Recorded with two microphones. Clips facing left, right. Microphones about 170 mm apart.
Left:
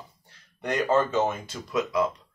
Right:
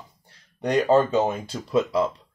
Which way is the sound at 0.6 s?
35° right (ahead or behind).